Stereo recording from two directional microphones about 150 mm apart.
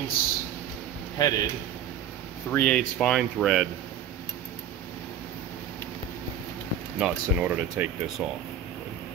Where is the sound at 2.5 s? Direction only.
10° left (ahead or behind).